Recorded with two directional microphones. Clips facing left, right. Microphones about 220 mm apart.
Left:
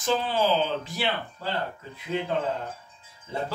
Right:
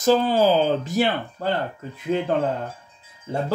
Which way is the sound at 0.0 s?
40° right (ahead or behind).